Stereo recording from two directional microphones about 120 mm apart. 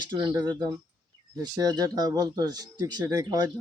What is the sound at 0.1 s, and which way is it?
Speech, 35° right (ahead or behind).